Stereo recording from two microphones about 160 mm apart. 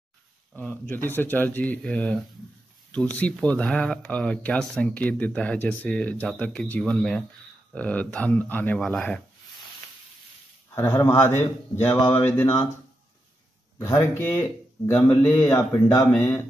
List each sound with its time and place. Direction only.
0.6 s speech: 10° left (ahead or behind)
10.7 s speech: 15° left (ahead or behind)
13.7 s speech: 20° left (ahead or behind)